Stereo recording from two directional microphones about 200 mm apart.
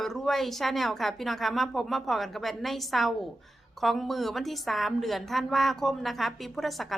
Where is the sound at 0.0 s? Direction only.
Centre (ahead or behind).